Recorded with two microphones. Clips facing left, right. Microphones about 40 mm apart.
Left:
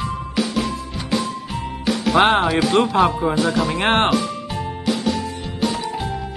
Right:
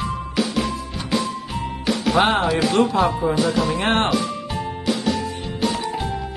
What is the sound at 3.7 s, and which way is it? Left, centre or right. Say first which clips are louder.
Speech: left 2 dB; left.